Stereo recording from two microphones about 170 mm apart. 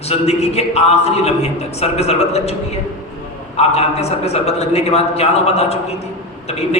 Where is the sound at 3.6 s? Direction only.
40° left (ahead or behind).